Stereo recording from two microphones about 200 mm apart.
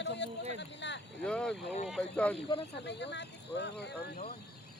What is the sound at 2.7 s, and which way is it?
Speech, 60° left (ahead or behind).